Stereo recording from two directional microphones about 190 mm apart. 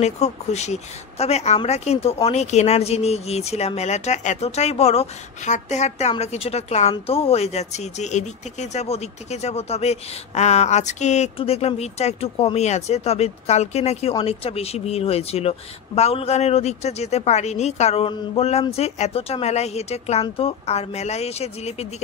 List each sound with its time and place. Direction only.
0.0 s speech: 35° left (ahead or behind)